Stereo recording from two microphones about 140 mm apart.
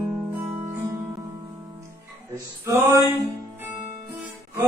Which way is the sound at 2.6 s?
20° right (ahead or behind).